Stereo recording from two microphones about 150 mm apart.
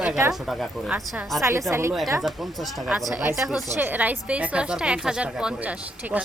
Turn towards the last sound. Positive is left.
turn(degrees=-10)  # may be behind; listen again after turning